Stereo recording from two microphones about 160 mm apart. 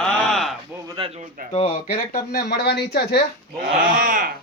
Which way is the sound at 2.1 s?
80° left.